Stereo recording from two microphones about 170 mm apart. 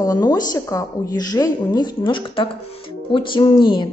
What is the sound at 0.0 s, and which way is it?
A woman's voice, 20° left (ahead or behind).